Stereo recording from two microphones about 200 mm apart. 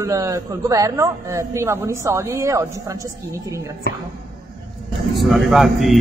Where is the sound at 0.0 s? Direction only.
15° right (ahead or behind).